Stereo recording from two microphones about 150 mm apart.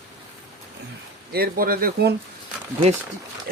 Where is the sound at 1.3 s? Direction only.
80° right.